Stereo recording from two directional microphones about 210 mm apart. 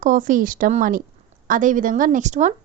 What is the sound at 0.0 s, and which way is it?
A woman's voice, 40° right (ahead or behind).